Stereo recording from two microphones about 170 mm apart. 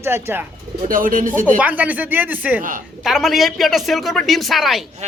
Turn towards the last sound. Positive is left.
turn(degrees=0)  # may be behind; listen again after turning